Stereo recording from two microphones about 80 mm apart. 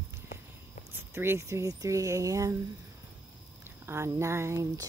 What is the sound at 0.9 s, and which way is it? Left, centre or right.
Speech, right.